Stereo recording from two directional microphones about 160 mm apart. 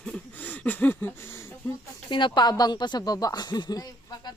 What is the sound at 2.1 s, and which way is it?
Speech, 30° left (ahead or behind).